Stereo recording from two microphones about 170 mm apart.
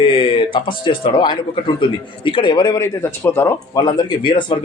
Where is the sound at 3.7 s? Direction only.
25° left (ahead or behind).